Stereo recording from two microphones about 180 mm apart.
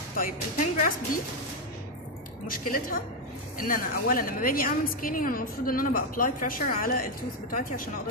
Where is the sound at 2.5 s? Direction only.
50° left (ahead or behind).